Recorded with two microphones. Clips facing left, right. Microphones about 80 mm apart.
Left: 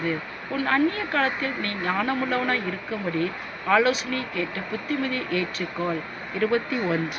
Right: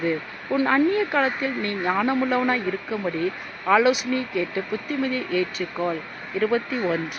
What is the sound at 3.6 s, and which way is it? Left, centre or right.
Speech, centre.